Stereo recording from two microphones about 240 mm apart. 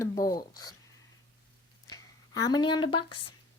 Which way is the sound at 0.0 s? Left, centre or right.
Centre.